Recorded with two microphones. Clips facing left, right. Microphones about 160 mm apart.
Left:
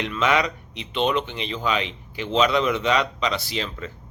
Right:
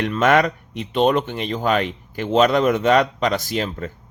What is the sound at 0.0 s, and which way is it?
Speech, 50° right (ahead or behind).